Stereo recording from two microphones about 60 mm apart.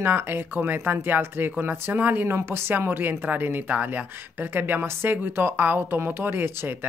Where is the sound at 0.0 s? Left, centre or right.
Right.